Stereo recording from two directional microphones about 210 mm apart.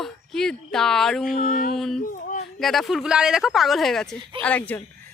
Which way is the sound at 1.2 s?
40° left (ahead or behind).